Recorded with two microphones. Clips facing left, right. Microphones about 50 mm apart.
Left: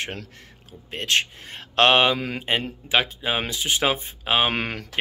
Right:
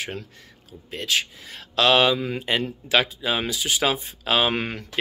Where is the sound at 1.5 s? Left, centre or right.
Left.